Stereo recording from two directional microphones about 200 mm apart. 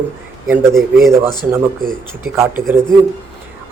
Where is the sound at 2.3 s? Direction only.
10° right (ahead or behind).